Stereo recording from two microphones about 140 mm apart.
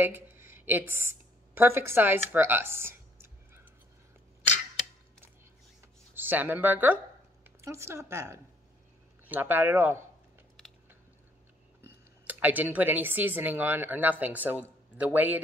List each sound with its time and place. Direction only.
0.0 s speech: 15° right (ahead or behind)
2.3 s computer keyboard: 15° right (ahead or behind)
6.1 s speech: 15° right (ahead or behind)
12.3 s speech: 10° right (ahead or behind)